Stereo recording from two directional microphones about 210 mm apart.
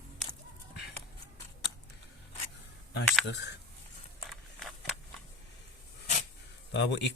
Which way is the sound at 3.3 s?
55° left (ahead or behind).